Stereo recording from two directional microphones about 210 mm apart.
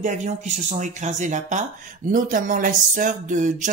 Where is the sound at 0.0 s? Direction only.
35° right (ahead or behind).